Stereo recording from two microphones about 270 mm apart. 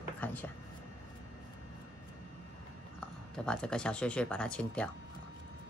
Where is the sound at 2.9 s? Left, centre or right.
Centre.